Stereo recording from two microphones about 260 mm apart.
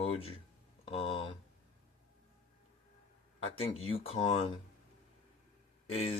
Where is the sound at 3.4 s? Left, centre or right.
Left.